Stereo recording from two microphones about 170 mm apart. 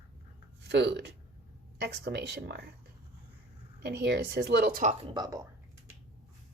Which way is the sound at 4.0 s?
75° right (ahead or behind).